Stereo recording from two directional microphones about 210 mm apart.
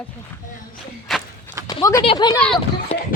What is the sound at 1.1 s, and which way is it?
Walk, centre (ahead or behind).